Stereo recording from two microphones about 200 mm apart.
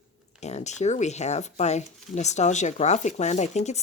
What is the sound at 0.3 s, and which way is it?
Speech, 35° left (ahead or behind).